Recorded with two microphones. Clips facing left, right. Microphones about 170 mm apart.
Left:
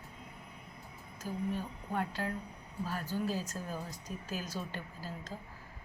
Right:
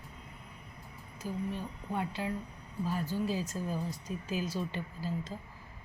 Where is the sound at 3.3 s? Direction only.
10° right (ahead or behind).